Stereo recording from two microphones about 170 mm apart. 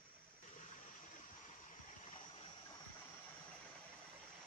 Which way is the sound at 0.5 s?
50° left (ahead or behind).